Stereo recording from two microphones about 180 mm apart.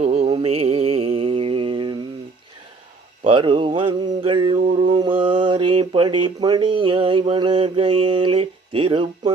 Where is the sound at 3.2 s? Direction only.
30° right (ahead or behind).